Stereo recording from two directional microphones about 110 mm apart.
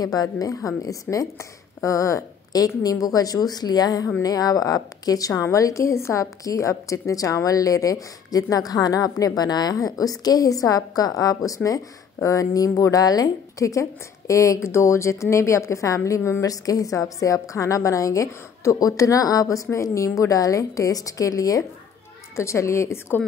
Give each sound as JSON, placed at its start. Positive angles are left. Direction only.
{"t": 0.0, "sound": "a woman's voice", "side_deg": 35}